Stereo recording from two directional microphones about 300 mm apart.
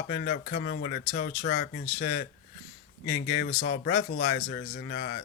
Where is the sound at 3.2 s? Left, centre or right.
Left.